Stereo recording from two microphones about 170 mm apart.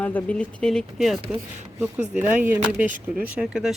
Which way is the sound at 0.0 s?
10° left (ahead or behind).